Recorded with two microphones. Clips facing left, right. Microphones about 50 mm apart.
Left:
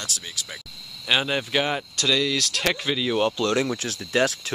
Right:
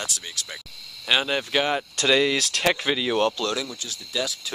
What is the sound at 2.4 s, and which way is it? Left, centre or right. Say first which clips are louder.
Speech: right 2 dB; centre.